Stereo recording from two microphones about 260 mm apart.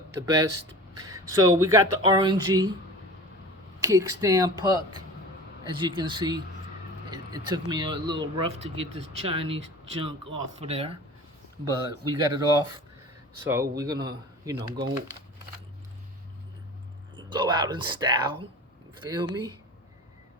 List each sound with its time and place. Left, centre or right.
0.1 s speech: centre
3.8 s speech: centre
5.8 s speech: centre
17.2 s speech: centre